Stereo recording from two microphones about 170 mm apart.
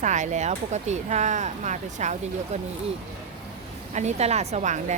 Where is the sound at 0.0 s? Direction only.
45° right (ahead or behind).